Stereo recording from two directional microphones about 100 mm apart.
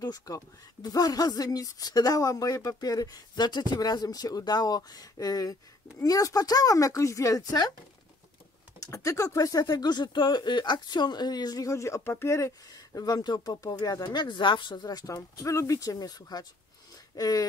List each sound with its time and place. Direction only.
0.0 s speech: 40° left (ahead or behind)
8.7 s speech: 35° left (ahead or behind)